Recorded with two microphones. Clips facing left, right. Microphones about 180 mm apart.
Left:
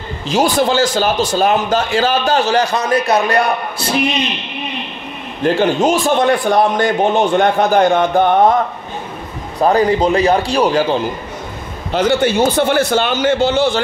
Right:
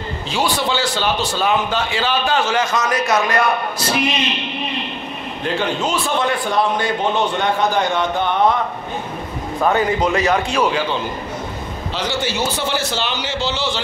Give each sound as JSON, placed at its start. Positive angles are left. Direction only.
{"t": 0.3, "sound": "a man's voice", "side_deg": 45}
{"t": 5.4, "sound": "a man's voice", "side_deg": 45}
{"t": 9.6, "sound": "a man's voice", "side_deg": 35}
{"t": 11.9, "sound": "a man's voice", "side_deg": 55}